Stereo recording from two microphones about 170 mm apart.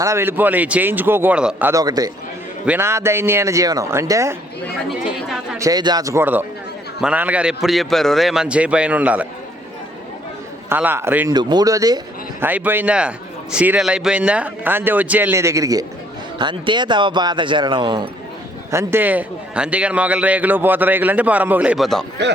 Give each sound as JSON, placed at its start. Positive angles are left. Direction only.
{"t": 0.0, "sound": "a man's voice", "side_deg": -15}
{"t": 4.9, "sound": "speech", "side_deg": -5}
{"t": 5.5, "sound": "a man's voice", "side_deg": -20}
{"t": 10.7, "sound": "a man's voice", "side_deg": -10}
{"t": 11.3, "sound": "a man's voice", "side_deg": -25}
{"t": 18.7, "sound": "a man's voice", "side_deg": -15}